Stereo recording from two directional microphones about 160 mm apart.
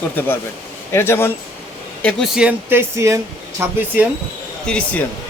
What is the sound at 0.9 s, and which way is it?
Speech, 15° left (ahead or behind).